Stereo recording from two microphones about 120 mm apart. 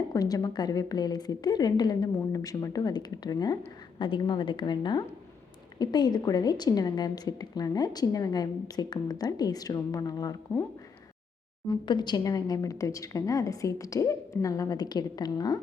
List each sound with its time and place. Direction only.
0.1 s a woman's voice: 30° left (ahead or behind)
11.7 s a woman's voice: 40° left (ahead or behind)